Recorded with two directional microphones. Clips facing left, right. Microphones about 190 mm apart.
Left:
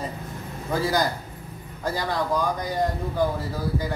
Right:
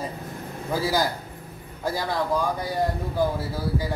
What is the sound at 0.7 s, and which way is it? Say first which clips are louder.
Speech: left 1 dB; 5° right (ahead or behind).